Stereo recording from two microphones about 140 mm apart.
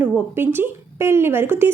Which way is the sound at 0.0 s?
15° right (ahead or behind).